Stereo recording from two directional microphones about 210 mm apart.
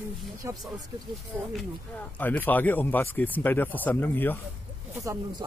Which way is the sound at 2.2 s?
10° left (ahead or behind).